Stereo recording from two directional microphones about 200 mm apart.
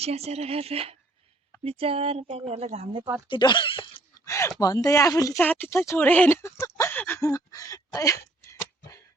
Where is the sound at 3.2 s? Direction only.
25° left (ahead or behind).